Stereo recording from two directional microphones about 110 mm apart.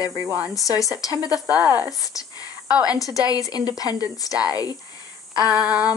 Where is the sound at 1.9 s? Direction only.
30° left (ahead or behind).